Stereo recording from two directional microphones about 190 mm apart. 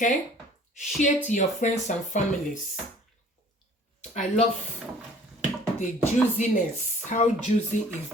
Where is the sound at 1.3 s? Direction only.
40° left (ahead or behind).